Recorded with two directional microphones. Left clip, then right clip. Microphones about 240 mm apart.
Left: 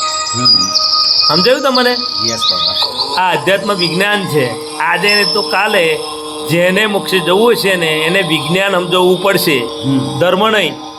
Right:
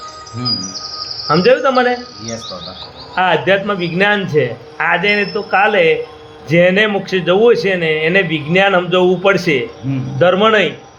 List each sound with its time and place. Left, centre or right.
0.0 s bird vocalization: left
1.7 s a man's voice: centre
2.4 s music: left
3.2 s a man's voice: centre